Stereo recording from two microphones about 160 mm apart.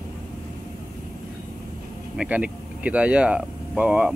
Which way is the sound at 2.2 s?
10° right (ahead or behind).